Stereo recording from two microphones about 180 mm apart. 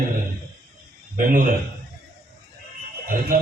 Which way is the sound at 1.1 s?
50° right (ahead or behind).